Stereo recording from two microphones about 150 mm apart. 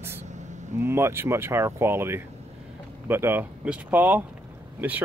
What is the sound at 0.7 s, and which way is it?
Speech, 15° right (ahead or behind).